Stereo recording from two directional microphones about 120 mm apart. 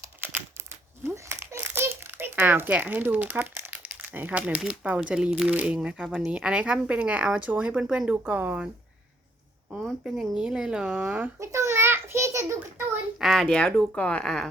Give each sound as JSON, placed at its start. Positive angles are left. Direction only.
{"t": 1.0, "sound": "a child's voice", "side_deg": -20}
{"t": 9.8, "sound": "speech", "side_deg": -5}
{"t": 11.3, "sound": "a sound", "side_deg": -25}
{"t": 13.1, "sound": "speech", "side_deg": 0}